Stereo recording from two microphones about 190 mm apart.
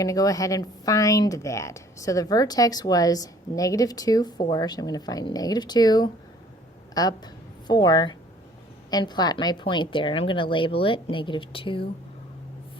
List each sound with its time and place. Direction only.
0.0 s speech: 20° left (ahead or behind)